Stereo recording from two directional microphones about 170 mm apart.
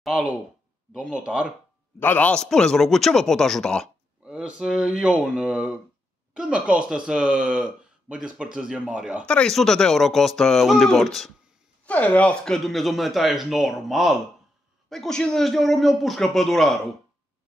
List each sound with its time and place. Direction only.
0.0 s speech: 5° right (ahead or behind)
2.0 s speech: 10° left (ahead or behind); by 9.2 s 5° right (ahead or behind)
9.2 s speech: 5° left (ahead or behind)